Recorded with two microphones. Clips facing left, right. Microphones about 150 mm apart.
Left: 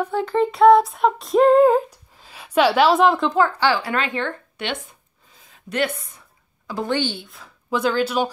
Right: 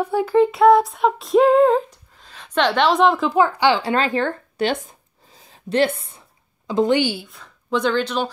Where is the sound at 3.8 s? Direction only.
35° right (ahead or behind); by 8.3 s 10° left (ahead or behind).